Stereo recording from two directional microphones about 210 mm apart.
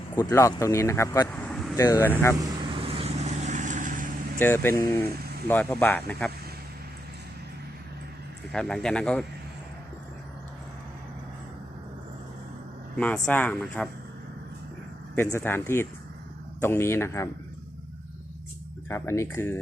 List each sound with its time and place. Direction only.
0.2 s speech: 15° left (ahead or behind)
2.4 s vehicle: 25° right (ahead or behind)
4.4 s speech: 10° left (ahead or behind)
8.5 s speech: centre (ahead or behind)
13.0 s speech: 5° left (ahead or behind)
15.1 s speech: 10° left (ahead or behind)
18.9 s speech: 15° left (ahead or behind)